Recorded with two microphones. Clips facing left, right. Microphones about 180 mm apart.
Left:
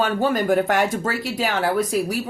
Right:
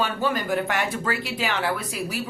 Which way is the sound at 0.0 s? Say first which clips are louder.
Left 5 dB; 45° left (ahead or behind).